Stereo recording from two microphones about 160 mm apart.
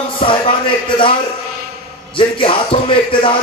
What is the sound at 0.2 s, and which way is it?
Speech, 30° left (ahead or behind).